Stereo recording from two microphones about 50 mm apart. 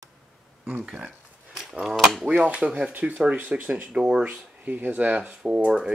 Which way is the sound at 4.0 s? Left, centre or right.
Centre.